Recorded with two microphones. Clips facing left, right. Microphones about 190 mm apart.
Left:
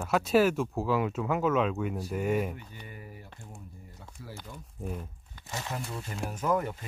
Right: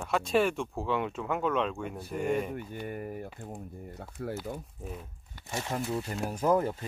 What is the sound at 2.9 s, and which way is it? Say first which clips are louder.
A man's voice: right 10 dB; 55° right (ahead or behind).